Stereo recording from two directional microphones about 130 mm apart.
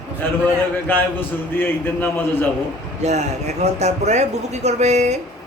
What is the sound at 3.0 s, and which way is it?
Speech, 60° right (ahead or behind).